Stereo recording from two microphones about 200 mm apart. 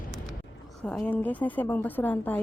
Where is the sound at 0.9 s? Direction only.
5° left (ahead or behind).